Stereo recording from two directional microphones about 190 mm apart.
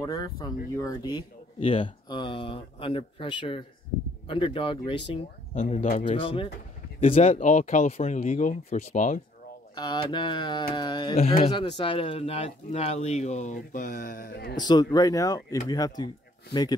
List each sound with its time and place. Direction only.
0.0 s speech: 20° left (ahead or behind)
5.1 s speech: 40° left (ahead or behind)
9.8 s speech: 25° left (ahead or behind); by 14.6 s 50° left (ahead or behind)
14.6 s speech: 20° left (ahead or behind)